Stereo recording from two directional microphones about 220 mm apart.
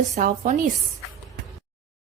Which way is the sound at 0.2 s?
35° right (ahead or behind).